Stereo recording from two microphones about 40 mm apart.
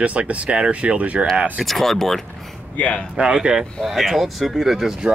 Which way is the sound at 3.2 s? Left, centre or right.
Right.